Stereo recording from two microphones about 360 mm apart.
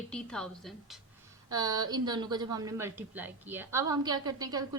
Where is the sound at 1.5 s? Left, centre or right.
Centre.